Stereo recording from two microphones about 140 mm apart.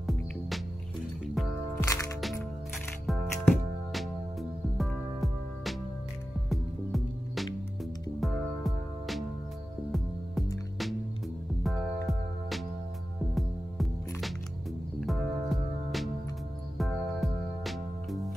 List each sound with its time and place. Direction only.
1.2 s music: centre (ahead or behind)
1.8 s music: 20° left (ahead or behind)
3.1 s music: centre (ahead or behind)
11.6 s music: centre (ahead or behind)